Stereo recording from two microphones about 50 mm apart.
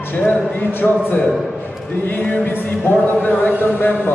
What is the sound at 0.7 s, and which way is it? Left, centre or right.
A man's voice, left.